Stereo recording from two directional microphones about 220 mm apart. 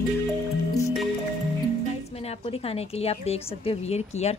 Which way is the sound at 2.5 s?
25° left (ahead or behind).